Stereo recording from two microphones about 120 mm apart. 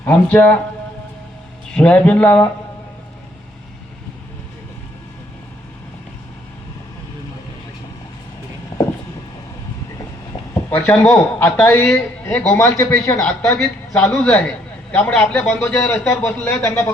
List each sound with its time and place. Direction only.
0.0 s a man's voice: 10° left (ahead or behind)
1.7 s a man's voice: 10° left (ahead or behind)
8.7 s vehicle: 30° left (ahead or behind)
10.5 s a man's voice: 15° left (ahead or behind)
13.2 s a man's voice: 10° left (ahead or behind)